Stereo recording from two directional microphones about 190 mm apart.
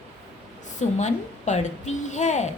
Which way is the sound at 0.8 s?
40° left (ahead or behind).